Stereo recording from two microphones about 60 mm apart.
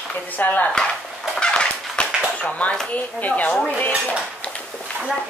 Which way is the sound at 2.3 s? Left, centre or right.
Left.